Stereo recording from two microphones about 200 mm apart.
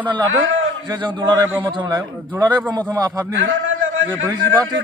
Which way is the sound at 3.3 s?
70° right (ahead or behind).